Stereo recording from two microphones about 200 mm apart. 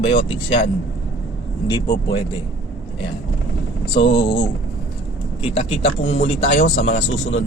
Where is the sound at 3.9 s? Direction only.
60° left (ahead or behind).